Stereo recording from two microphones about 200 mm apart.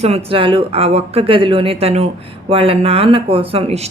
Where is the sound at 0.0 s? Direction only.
30° right (ahead or behind).